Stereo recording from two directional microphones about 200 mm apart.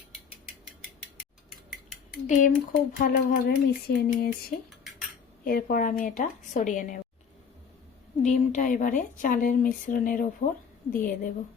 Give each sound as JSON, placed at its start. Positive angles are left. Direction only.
{"t": 2.2, "sound": "speech", "side_deg": 40}
{"t": 8.2, "sound": "speech", "side_deg": 40}